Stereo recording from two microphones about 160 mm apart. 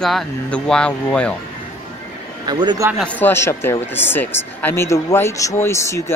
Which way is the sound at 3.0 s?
10° left (ahead or behind).